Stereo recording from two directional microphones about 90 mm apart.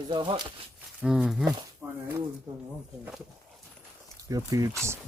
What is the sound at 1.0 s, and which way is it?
Speech, 5° right (ahead or behind).